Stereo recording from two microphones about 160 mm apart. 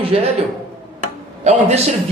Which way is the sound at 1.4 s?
45° right (ahead or behind).